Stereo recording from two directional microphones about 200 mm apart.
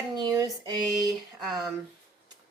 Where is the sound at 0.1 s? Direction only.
20° right (ahead or behind).